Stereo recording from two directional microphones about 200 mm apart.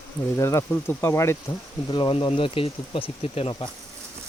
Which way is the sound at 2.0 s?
25° left (ahead or behind).